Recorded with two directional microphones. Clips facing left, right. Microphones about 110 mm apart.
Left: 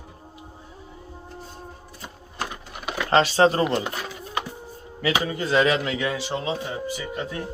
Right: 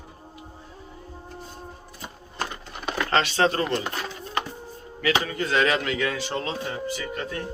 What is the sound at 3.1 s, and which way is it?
Speech, 30° left (ahead or behind).